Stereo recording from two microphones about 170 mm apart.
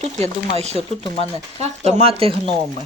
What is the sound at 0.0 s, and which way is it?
Speech, 40° right (ahead or behind).